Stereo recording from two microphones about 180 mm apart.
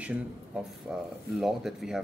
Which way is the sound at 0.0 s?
5° right (ahead or behind).